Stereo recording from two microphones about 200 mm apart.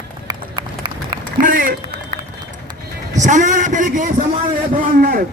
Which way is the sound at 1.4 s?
45° right (ahead or behind).